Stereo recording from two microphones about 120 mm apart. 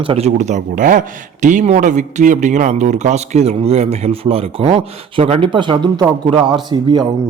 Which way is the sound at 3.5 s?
60° right (ahead or behind).